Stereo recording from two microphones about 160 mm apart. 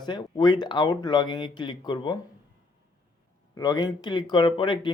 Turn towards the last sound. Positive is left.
turn(degrees=30)  # may be behind; listen again after turning